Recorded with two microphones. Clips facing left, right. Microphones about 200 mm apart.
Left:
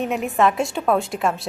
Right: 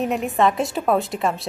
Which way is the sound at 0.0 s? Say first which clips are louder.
Even; centre (ahead or behind).